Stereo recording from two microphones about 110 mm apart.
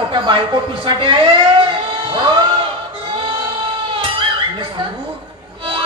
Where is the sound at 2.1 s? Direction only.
45° right (ahead or behind).